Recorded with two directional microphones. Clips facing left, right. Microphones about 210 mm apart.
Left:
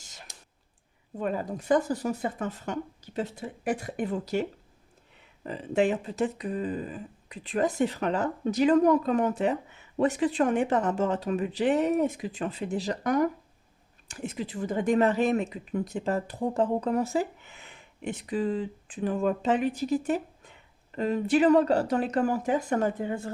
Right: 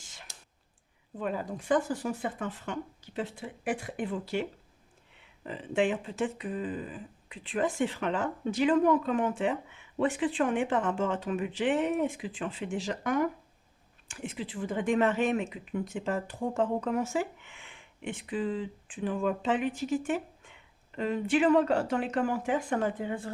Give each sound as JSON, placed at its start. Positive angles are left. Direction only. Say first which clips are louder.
{"t": 0.0, "sound": "whispering", "louder": "left 2 dB", "side_deg": 40}
{"t": 1.2, "sound": "speech", "louder": "left 3 dB", "side_deg": 45}